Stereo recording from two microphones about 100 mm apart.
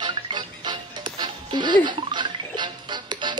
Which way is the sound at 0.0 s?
50° right (ahead or behind).